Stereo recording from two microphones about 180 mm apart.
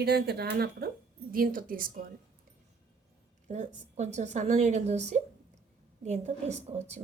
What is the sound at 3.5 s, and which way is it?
A woman's voice, 40° right (ahead or behind).